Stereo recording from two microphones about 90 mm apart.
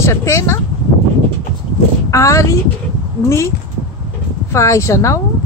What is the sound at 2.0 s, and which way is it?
A woman's voice, 35° left (ahead or behind).